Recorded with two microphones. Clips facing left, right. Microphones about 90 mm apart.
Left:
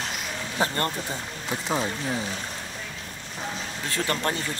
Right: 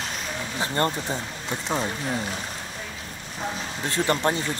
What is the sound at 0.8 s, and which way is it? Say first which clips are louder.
Speech: right 4 dB; 25° right (ahead or behind).